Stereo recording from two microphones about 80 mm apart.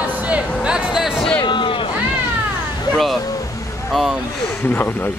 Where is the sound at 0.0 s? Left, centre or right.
Centre.